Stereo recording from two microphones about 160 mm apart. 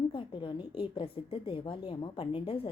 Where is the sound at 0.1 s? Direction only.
30° left (ahead or behind).